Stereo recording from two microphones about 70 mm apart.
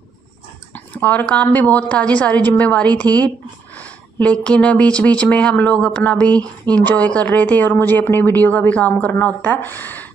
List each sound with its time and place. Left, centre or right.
0.7 s a woman's voice: left